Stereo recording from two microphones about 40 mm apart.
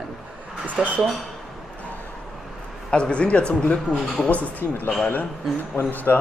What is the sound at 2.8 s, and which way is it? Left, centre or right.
Speech, left.